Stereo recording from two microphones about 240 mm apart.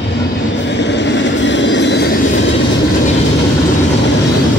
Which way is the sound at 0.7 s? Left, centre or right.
Left.